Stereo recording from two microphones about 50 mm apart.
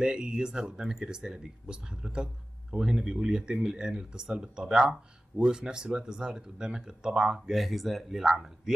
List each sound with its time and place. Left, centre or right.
0.0 s speech: centre